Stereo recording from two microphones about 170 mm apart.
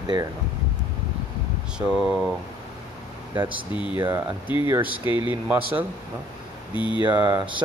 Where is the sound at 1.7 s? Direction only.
5° right (ahead or behind).